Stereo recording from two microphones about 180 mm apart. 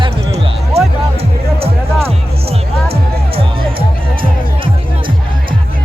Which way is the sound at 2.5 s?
35° right (ahead or behind).